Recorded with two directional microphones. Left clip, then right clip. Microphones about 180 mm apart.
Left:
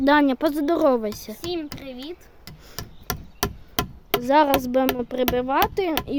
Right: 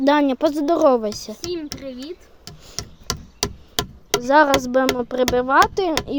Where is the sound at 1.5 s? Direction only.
15° left (ahead or behind).